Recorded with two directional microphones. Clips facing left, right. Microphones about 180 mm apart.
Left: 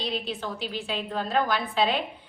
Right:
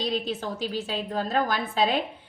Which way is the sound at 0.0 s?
40° right (ahead or behind).